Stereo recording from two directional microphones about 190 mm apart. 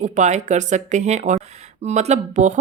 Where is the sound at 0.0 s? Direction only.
40° right (ahead or behind).